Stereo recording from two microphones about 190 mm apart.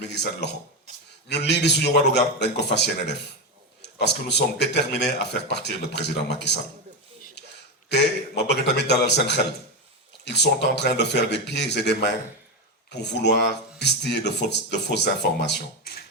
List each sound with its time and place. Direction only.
0.0 s speech: 65° left (ahead or behind)
7.9 s speech: 60° left (ahead or behind)